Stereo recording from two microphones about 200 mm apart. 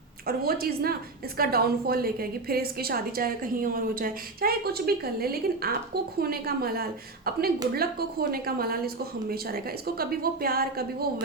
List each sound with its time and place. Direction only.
0.3 s a woman's voice: 50° right (ahead or behind)